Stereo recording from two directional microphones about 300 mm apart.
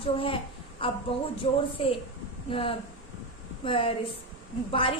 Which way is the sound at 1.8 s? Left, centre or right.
Centre.